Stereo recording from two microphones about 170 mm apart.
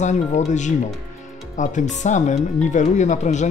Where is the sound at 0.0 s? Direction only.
45° left (ahead or behind).